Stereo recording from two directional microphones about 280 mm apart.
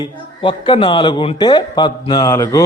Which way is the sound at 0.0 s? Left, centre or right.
Centre.